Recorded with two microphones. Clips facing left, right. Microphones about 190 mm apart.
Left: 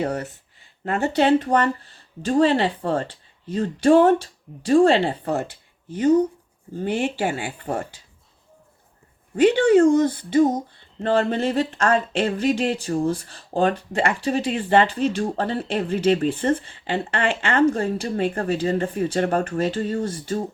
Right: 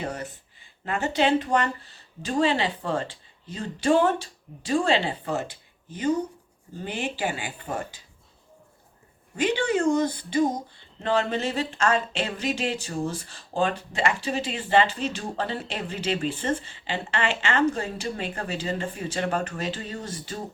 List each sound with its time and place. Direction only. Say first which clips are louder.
0.0 s speech: left 7 dB; 65° left (ahead or behind)
0.9 s speech: left 5 dB; 50° left (ahead or behind)
7.0 s speech: left 5 dB; 50° left (ahead or behind)
9.3 s speech: left 9 dB; 50° left (ahead or behind)